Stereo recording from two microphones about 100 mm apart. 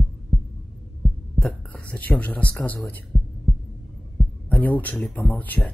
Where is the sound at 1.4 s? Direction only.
15° left (ahead or behind).